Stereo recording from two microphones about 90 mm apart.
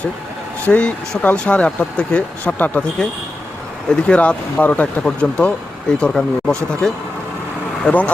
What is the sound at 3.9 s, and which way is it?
Speech, 10° left (ahead or behind).